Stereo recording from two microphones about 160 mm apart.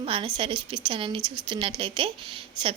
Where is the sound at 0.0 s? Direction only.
35° right (ahead or behind).